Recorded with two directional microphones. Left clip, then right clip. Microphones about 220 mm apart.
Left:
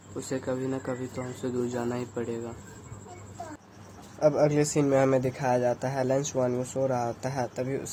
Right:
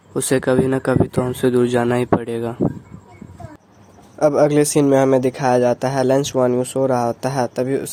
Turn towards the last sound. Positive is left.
turn(degrees=-45)  # may be behind; listen again after turning